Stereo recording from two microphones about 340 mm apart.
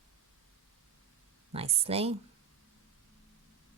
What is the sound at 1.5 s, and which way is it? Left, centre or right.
Speech, centre.